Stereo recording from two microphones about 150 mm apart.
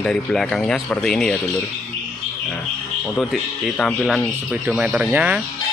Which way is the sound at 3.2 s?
Centre (ahead or behind).